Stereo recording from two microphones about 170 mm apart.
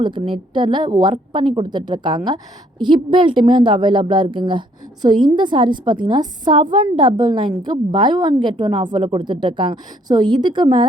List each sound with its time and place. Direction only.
0.0 s a woman's voice: 30° right (ahead or behind)